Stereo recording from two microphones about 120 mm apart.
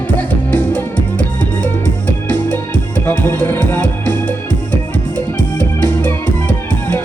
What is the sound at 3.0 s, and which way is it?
Music, 15° left (ahead or behind).